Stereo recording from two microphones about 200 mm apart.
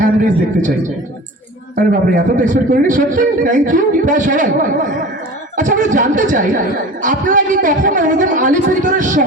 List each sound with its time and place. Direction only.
0.0 s a man's voice: 40° right (ahead or behind)
1.7 s a man's voice: 40° right (ahead or behind)